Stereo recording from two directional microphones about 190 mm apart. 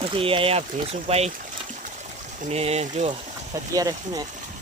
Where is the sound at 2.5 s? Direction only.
35° right (ahead or behind).